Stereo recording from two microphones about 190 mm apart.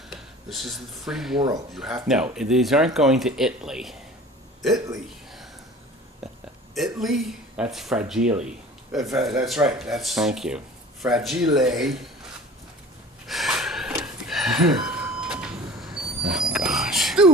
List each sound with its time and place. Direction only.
0.1 s speech: centre (ahead or behind)
6.7 s speech: centre (ahead or behind)
13.2 s snort: centre (ahead or behind)
14.0 s a sound: centre (ahead or behind)